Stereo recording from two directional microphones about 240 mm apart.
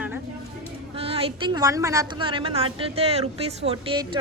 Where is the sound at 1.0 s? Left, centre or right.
Right.